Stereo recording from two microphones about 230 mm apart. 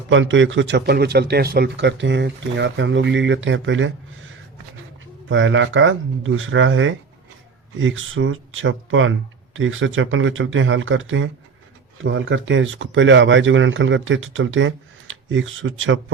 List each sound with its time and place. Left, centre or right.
0.1 s speech: right
5.3 s speech: right